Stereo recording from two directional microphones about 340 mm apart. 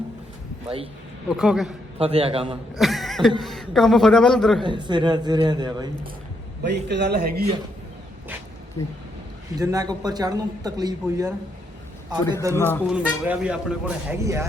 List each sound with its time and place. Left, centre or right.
1.4 s a man's voice: centre
2.0 s speech: centre
2.7 s a man's voice: centre
4.6 s speech: centre
6.6 s a man's voice: right
9.6 s speech: centre
12.5 s a man's voice: centre